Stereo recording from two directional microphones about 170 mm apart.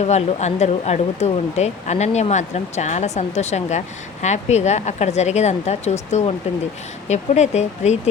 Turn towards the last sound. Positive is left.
turn(degrees=40)  # may be behind; listen again after turning